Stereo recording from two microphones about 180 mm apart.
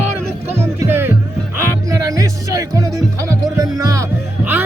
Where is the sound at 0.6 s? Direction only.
10° right (ahead or behind).